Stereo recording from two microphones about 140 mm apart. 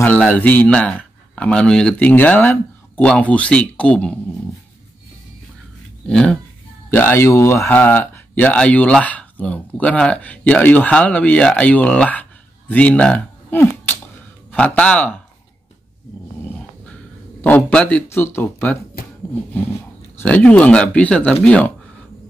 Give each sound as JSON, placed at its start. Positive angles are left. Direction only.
{"t": 0.0, "sound": "speech", "side_deg": 10}
{"t": 6.0, "sound": "speech", "side_deg": 5}
{"t": 17.4, "sound": "speech", "side_deg": 10}
{"t": 19.0, "sound": "a sound", "side_deg": 90}
{"t": 20.2, "sound": "speech", "side_deg": 10}